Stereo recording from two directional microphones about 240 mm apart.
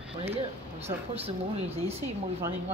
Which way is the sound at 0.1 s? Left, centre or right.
Right.